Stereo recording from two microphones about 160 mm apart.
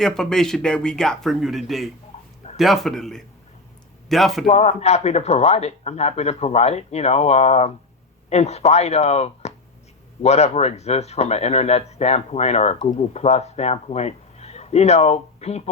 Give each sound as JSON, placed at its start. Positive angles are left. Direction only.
{"t": 0.0, "sound": "speech", "side_deg": 5}
{"t": 2.1, "sound": "a sound", "side_deg": 45}
{"t": 2.6, "sound": "speech", "side_deg": 0}
{"t": 4.4, "sound": "speech", "side_deg": 45}